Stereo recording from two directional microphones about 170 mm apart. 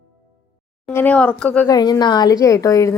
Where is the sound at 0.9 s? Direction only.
10° left (ahead or behind).